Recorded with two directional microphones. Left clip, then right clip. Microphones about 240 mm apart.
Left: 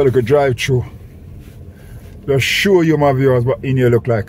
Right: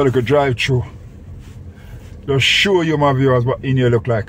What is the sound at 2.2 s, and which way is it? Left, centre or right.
A man's voice, left.